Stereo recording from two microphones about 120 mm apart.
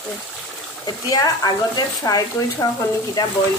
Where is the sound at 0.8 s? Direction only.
30° left (ahead or behind).